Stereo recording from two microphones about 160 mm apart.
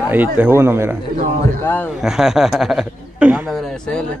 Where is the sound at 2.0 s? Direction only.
Centre (ahead or behind).